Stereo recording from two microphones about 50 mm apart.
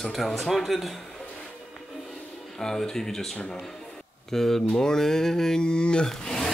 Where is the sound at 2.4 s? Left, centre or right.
Centre.